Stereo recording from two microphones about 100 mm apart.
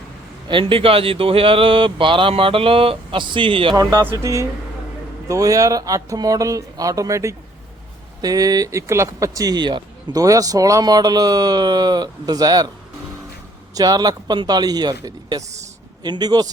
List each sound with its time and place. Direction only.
0.4 s speech: 60° right (ahead or behind)
3.8 s speech: 40° right (ahead or behind)
10.1 s speech: 35° right (ahead or behind)
13.7 s a man's voice: 40° right (ahead or behind)